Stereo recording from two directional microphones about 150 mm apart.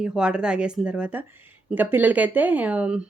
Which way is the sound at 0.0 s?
5° right (ahead or behind).